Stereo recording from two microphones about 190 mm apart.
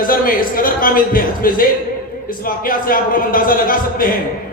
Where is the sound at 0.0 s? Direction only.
50° left (ahead or behind).